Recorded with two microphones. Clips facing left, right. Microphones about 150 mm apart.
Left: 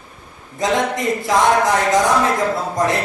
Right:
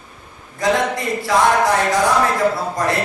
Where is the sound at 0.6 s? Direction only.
20° left (ahead or behind).